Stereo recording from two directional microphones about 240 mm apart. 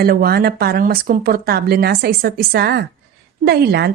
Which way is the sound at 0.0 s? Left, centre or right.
Right.